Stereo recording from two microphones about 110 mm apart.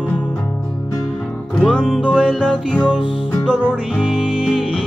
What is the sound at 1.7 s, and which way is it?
Music, centre (ahead or behind).